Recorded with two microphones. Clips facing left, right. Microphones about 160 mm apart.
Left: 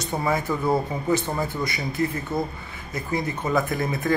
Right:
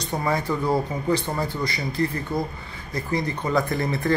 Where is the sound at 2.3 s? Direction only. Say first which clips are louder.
Even; centre (ahead or behind).